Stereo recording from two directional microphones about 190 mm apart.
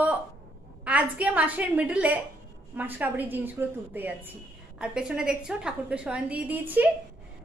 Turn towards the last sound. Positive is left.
turn(degrees=-10)  # may be behind; listen again after turning